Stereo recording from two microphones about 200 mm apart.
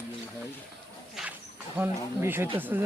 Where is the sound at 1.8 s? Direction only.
10° right (ahead or behind).